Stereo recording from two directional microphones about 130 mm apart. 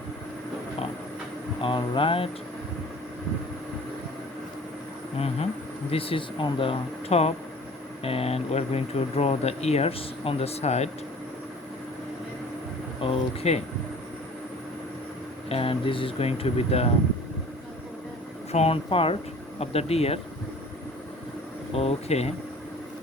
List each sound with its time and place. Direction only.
1.6 s speech: 40° left (ahead or behind)
5.9 s speech: 45° left (ahead or behind)
13.0 s speech: 50° left (ahead or behind)
15.4 s speech: 45° left (ahead or behind)
18.5 s speech: 50° left (ahead or behind)
21.7 s speech: 50° left (ahead or behind)